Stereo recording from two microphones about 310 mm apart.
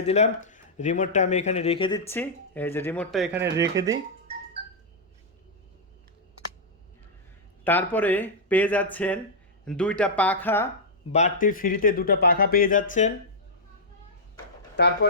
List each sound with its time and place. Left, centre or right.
0.0 s speech: left; by 4.0 s centre
7.6 s speech: centre
11.1 s speech: left
14.8 s speech: left